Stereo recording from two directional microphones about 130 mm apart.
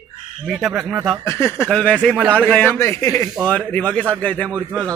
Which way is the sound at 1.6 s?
5° left (ahead or behind).